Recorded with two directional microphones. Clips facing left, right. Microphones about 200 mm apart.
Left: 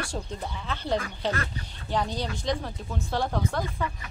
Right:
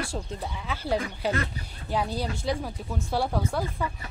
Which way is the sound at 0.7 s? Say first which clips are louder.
Right 1 dB; 10° right (ahead or behind).